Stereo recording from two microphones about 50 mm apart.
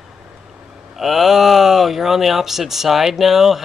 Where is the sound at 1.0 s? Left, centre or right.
Centre.